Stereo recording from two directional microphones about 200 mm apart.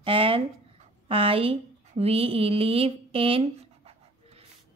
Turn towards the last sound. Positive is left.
turn(degrees=-30)  # may be behind; listen again after turning